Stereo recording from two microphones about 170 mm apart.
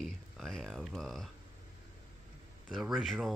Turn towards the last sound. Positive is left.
turn(degrees=0)  # may be behind; listen again after turning